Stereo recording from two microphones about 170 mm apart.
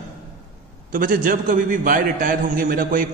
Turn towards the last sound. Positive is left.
turn(degrees=-50)  # may be behind; listen again after turning